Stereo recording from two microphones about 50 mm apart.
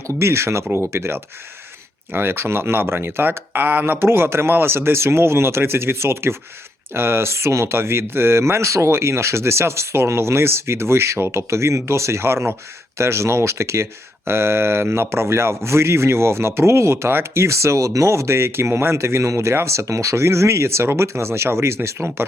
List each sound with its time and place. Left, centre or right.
0.1 s speech: right
14.3 s speech: right
17.4 s speech: right
18.9 s speech: right